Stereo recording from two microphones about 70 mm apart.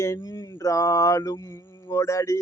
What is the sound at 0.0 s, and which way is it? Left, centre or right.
Mantra, left.